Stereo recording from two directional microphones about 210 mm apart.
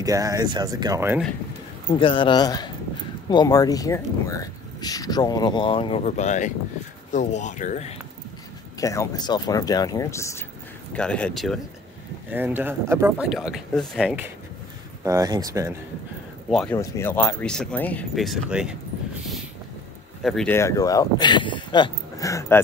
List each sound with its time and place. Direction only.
0.0 s speech: 15° right (ahead or behind)
2.0 s speech: 25° left (ahead or behind)
8.7 s speech: 15° left (ahead or behind); by 14.2 s centre (ahead or behind)
15.0 s speech: 15° right (ahead or behind)
16.4 s speech: 5° left (ahead or behind)
16.7 s speech: 15° left (ahead or behind); by 18.8 s 5° right (ahead or behind)
20.2 s speech: 5° left (ahead or behind)